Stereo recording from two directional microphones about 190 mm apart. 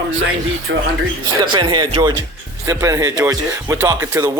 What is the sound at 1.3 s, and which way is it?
Speech, 20° right (ahead or behind).